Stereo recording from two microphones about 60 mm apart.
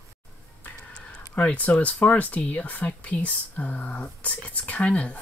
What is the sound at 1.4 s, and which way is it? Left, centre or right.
Speech, left.